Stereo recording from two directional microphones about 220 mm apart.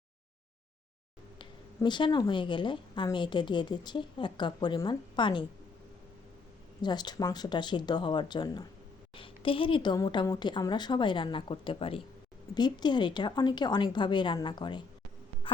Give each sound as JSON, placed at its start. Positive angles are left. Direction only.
{"t": 1.4, "sound": "a woman's voice", "side_deg": 20}
{"t": 6.8, "sound": "a woman's voice", "side_deg": 20}
{"t": 15.4, "sound": "insect", "side_deg": 25}